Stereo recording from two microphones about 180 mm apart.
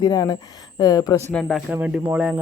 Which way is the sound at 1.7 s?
10° right (ahead or behind).